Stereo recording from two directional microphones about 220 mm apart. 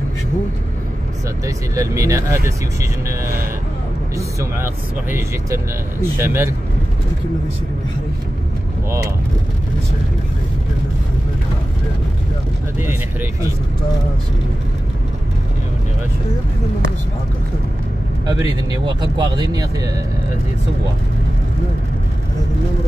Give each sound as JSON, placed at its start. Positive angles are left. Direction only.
{"t": 1.4, "sound": "speech", "side_deg": -15}
{"t": 5.1, "sound": "speech", "side_deg": -10}
{"t": 12.7, "sound": "speech", "side_deg": -10}
{"t": 18.2, "sound": "speech", "side_deg": -20}